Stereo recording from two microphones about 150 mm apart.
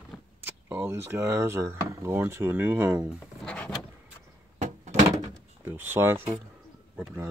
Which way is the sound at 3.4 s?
5° left (ahead or behind).